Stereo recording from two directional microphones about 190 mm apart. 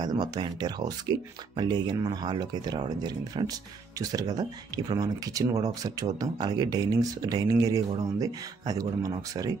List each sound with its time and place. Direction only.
0.0 s speech: 20° right (ahead or behind)